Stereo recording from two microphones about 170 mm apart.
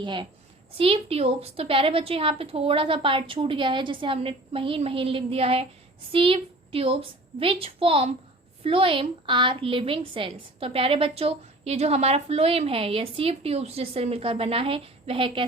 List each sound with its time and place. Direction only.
0.0 s a woman's voice: 30° right (ahead or behind)